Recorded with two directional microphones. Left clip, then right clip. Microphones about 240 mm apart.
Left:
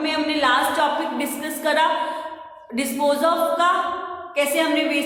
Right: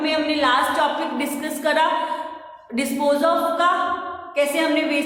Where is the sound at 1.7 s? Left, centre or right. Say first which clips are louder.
Even; centre.